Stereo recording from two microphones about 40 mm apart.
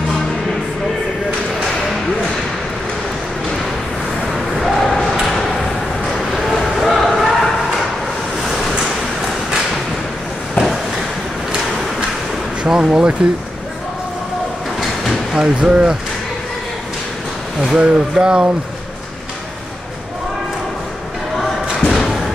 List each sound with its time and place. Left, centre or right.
4.6 s a sound: centre
12.6 s speech: centre
15.3 s speech: right
17.7 s speech: right
21.8 s thump: centre